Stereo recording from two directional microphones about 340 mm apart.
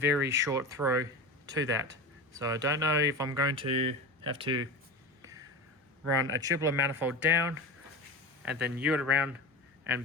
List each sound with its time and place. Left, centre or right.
0.0 s speech: centre
5.2 s a sound: centre
6.4 s speech: centre